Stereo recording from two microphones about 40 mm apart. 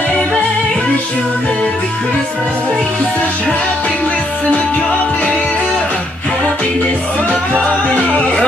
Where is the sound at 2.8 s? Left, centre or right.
Left.